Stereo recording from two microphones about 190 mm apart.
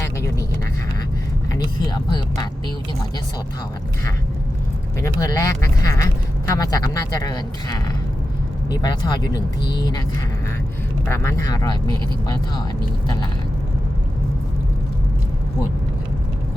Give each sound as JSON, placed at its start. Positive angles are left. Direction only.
{"t": 1.5, "sound": "speech", "side_deg": 20}
{"t": 5.2, "sound": "speech", "side_deg": 15}
{"t": 11.0, "sound": "speech", "side_deg": 15}